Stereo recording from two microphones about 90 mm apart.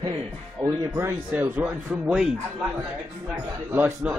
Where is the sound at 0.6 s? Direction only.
35° right (ahead or behind).